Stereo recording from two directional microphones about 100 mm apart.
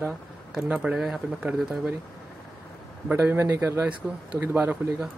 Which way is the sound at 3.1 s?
20° right (ahead or behind).